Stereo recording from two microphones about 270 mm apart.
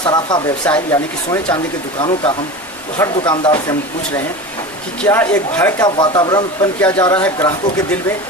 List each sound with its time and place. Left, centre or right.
0.0 s speech: centre